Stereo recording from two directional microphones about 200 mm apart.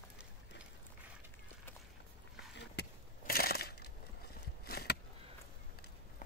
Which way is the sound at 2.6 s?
50° left (ahead or behind).